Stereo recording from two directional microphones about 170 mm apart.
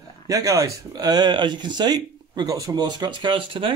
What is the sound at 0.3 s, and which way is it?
Speech, 20° right (ahead or behind).